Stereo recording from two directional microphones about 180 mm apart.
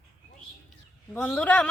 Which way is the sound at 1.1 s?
5° left (ahead or behind).